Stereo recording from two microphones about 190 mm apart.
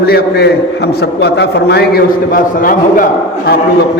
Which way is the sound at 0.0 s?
60° left (ahead or behind).